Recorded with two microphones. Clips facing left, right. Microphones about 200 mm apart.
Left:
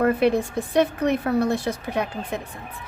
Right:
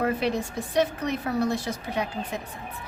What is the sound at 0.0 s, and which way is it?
A woman's voice, 55° left (ahead or behind).